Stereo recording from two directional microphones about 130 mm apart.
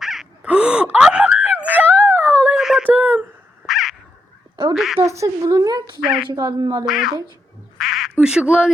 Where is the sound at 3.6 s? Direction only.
Centre (ahead or behind).